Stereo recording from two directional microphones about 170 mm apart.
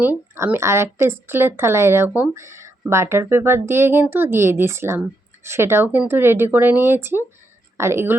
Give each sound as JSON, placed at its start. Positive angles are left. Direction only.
{"t": 0.0, "sound": "speech", "side_deg": -10}